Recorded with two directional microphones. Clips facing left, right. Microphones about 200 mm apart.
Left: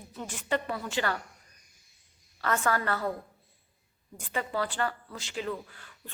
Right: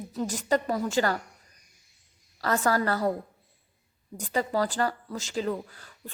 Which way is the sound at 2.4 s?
35° right (ahead or behind).